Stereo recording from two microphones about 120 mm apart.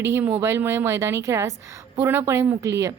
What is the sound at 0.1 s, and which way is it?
Speech, 20° right (ahead or behind).